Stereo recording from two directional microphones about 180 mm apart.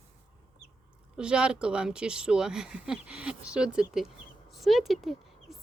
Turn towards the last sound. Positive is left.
turn(degrees=0)  # may be behind; listen again after turning